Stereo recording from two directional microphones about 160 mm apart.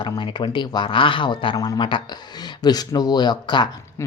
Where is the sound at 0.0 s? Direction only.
30° left (ahead or behind).